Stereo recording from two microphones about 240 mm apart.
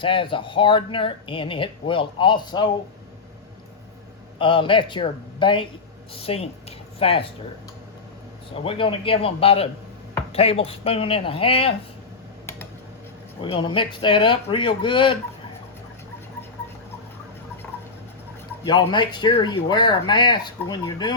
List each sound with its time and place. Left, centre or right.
0.0 s speech: left
4.4 s speech: left
8.6 s speech: left
13.4 s speech: centre
18.6 s speech: centre